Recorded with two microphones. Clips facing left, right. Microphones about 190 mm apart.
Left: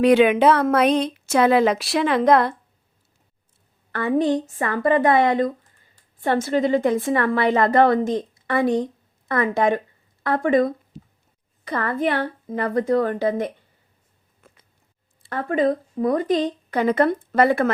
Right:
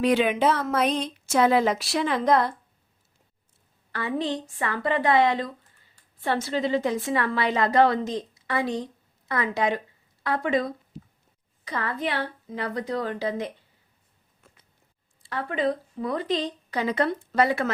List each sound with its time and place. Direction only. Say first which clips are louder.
0.0 s a woman's voice: left 7 dB; 65° left (ahead or behind)
3.9 s a woman's voice: left 8 dB; 50° left (ahead or behind)
15.2 s speech: left 6 dB; 45° left (ahead or behind)